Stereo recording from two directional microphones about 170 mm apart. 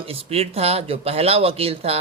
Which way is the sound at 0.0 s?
35° right (ahead or behind).